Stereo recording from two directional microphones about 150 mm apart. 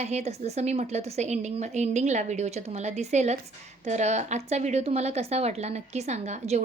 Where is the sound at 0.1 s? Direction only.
45° right (ahead or behind).